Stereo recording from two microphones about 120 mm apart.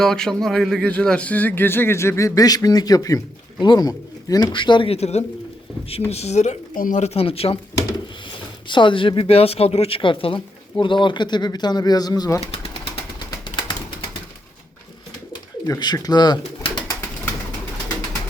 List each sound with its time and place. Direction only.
0.0 s speech: 5° left (ahead or behind); by 4.9 s 45° left (ahead or behind)
4.9 s speech: 65° left (ahead or behind)
8.6 s speech: 40° left (ahead or behind)
15.6 s speech: 35° left (ahead or behind)